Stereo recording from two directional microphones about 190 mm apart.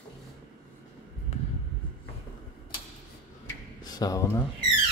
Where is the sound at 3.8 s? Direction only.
20° left (ahead or behind).